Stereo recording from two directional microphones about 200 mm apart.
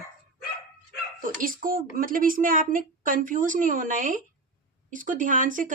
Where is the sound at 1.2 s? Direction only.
45° right (ahead or behind).